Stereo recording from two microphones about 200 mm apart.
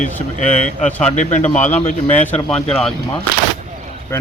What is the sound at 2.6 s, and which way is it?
Speech, 5° left (ahead or behind).